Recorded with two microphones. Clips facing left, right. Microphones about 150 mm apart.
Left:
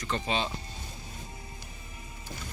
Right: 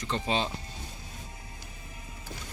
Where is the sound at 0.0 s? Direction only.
30° right (ahead or behind).